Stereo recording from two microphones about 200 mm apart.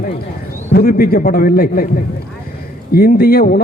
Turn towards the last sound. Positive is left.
turn(degrees=50)  # may be behind; listen again after turning